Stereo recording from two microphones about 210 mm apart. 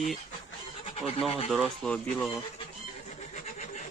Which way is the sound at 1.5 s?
5° left (ahead or behind).